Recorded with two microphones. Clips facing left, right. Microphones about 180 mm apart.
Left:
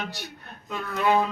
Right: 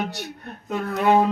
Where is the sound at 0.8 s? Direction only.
50° right (ahead or behind).